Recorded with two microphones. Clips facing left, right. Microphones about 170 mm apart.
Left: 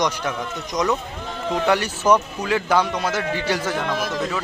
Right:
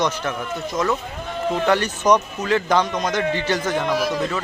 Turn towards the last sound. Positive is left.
turn(degrees=-10)  # may be behind; listen again after turning